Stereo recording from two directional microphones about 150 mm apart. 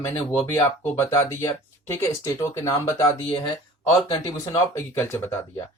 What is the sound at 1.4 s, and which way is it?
Speech, 20° left (ahead or behind).